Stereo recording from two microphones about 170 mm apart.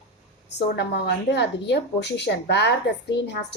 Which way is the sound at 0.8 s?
85° left.